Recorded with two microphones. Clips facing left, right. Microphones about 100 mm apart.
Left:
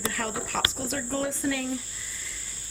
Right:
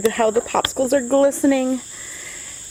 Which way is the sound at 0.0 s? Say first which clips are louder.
Right 15 dB; 65° right (ahead or behind).